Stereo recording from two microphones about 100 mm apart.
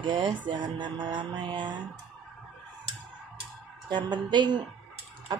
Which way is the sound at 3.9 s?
50° right (ahead or behind).